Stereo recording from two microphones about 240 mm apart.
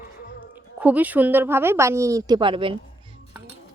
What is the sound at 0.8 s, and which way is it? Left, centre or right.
Speech, centre.